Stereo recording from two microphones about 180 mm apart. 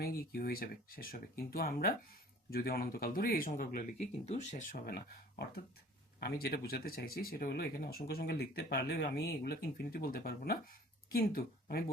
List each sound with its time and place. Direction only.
0.0 s speech: 60° left (ahead or behind)